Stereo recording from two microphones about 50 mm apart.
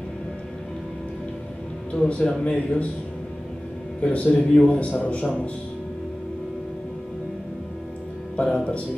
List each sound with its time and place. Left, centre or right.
1.9 s speech: left
4.0 s speech: left
8.4 s speech: left